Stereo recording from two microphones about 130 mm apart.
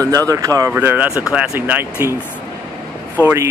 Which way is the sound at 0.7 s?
15° right (ahead or behind).